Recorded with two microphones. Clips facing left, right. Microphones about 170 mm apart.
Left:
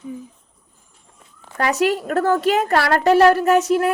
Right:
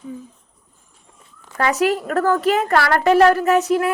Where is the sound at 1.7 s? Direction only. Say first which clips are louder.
Even; 30° left (ahead or behind).